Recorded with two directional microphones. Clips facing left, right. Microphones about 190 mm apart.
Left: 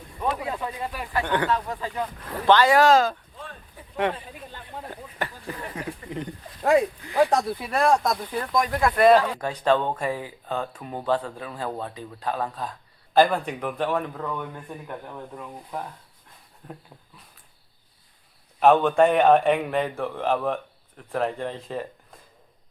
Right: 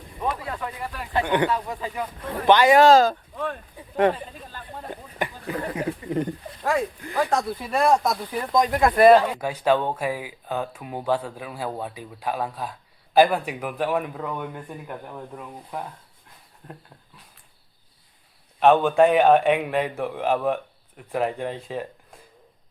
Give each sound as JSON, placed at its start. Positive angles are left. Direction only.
{"t": 0.3, "sound": "a sound", "side_deg": 20}
{"t": 1.2, "sound": "speech", "side_deg": -15}
{"t": 2.8, "sound": "speech", "side_deg": -35}
{"t": 3.3, "sound": "a sound", "side_deg": -65}
{"t": 5.2, "sound": "a sound", "side_deg": -15}
{"t": 6.1, "sound": "speech", "side_deg": -45}
{"t": 6.7, "sound": "speech", "side_deg": 15}
{"t": 7.7, "sound": "a man's voice", "side_deg": -5}
{"t": 8.5, "sound": "speech", "side_deg": -20}
{"t": 9.0, "sound": "speech", "side_deg": -5}
{"t": 18.6, "sound": "a man's voice", "side_deg": 0}